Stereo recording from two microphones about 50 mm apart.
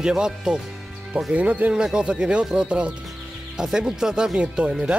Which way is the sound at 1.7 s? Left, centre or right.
Centre.